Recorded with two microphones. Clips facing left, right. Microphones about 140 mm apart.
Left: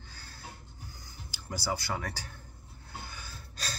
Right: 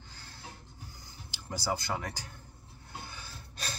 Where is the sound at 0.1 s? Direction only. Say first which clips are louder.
Even; 20° right (ahead or behind).